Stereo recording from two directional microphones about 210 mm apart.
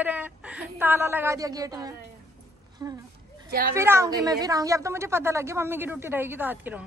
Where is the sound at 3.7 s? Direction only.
15° right (ahead or behind).